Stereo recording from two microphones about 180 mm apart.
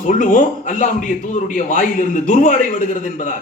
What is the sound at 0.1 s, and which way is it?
A man's voice, 45° left (ahead or behind).